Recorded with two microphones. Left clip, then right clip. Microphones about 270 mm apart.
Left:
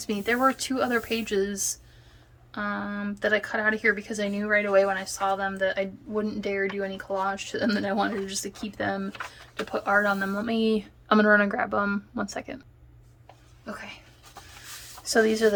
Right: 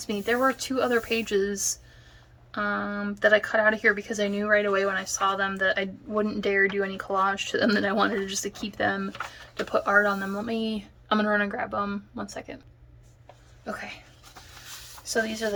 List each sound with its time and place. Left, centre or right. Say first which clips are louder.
0.0 s speech: even; centre
13.7 s speech: right 3 dB; centre
15.0 s a woman's voice: left 6 dB; centre